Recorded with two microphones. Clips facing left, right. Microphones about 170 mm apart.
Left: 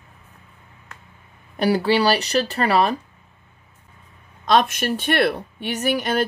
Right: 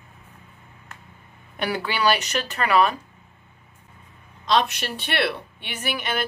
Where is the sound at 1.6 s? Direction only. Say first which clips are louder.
Left 6 dB; 35° left (ahead or behind).